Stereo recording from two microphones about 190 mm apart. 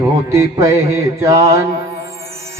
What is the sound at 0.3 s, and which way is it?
Mantra, 15° right (ahead or behind).